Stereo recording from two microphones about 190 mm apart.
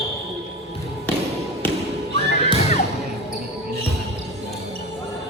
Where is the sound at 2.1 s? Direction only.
30° left (ahead or behind).